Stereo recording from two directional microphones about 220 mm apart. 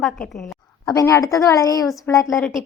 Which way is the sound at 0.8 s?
15° left (ahead or behind).